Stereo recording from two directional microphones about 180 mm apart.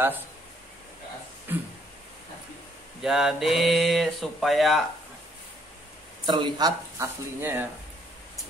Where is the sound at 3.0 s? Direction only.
Centre (ahead or behind).